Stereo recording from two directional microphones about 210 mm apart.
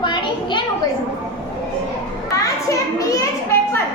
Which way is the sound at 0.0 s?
20° left (ahead or behind).